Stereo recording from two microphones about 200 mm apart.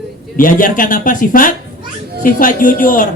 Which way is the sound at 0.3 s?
45° left (ahead or behind).